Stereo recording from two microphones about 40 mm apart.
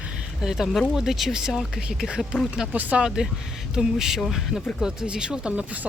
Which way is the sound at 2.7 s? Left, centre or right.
Right.